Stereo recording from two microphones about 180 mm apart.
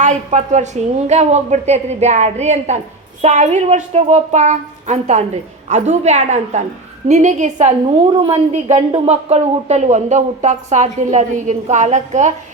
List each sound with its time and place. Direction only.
0.0 s a woman's voice: 40° right (ahead or behind)